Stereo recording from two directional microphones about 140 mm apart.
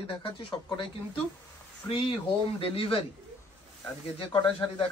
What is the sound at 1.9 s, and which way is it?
Speech, 40° left (ahead or behind).